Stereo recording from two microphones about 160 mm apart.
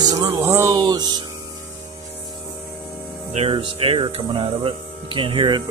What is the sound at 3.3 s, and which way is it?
Speech, 35° right (ahead or behind).